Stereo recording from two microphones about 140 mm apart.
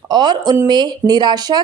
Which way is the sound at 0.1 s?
30° right (ahead or behind).